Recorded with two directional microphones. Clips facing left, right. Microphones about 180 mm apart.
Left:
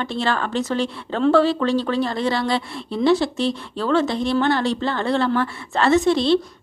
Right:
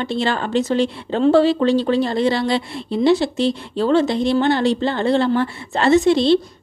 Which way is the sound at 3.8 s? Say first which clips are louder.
Right 4 dB; 30° right (ahead or behind).